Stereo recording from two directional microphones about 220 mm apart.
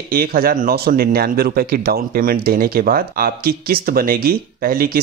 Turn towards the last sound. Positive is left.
turn(degrees=-40)  # may be behind; listen again after turning